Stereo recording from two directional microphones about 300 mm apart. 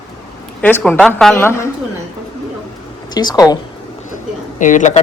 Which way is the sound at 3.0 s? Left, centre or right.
Centre.